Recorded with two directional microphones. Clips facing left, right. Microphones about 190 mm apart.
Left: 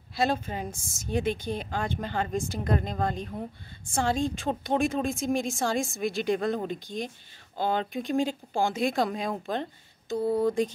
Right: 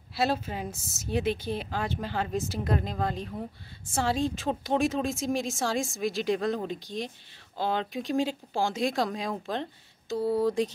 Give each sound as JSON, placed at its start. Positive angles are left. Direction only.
{"t": 0.1, "sound": "speech", "side_deg": -5}